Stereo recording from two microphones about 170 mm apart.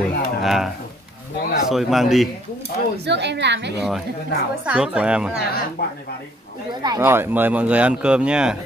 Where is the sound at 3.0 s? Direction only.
90° right.